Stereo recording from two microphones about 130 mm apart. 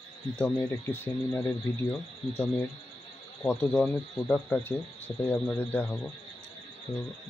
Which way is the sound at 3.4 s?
10° left (ahead or behind).